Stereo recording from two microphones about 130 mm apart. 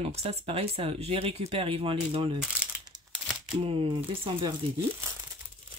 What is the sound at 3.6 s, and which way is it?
Speech, 45° right (ahead or behind).